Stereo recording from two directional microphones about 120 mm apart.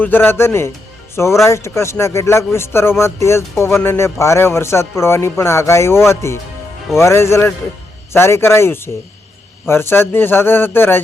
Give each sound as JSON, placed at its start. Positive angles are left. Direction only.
{"t": 0.0, "sound": "a man's voice", "side_deg": 15}